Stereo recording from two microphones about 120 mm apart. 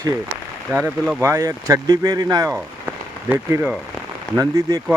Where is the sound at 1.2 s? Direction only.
25° right (ahead or behind).